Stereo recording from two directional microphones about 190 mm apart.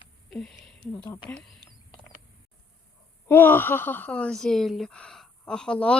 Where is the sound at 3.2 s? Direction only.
10° left (ahead or behind).